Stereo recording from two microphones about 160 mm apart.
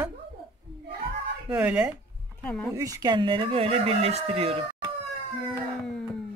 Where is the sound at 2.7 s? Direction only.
20° right (ahead or behind); by 4.6 s 40° right (ahead or behind).